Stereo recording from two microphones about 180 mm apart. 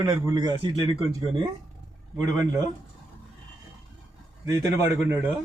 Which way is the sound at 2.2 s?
20° right (ahead or behind).